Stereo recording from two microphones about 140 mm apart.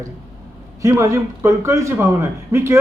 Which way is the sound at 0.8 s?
20° right (ahead or behind).